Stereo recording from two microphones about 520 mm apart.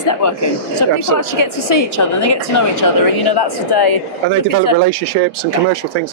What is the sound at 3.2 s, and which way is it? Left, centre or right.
A woman's voice, left.